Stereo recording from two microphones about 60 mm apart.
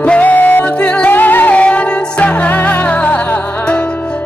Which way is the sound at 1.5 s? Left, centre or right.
Left.